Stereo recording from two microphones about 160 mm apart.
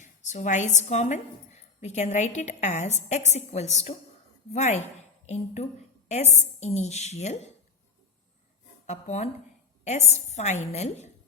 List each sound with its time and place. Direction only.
0.0 s a woman's voice: 50° left (ahead or behind)
8.9 s a woman's voice: 45° left (ahead or behind)